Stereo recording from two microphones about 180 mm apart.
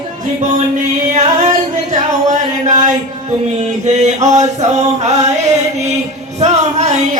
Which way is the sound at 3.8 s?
40° right (ahead or behind).